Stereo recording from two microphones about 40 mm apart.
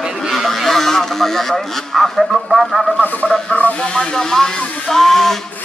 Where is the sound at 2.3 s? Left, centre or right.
Centre.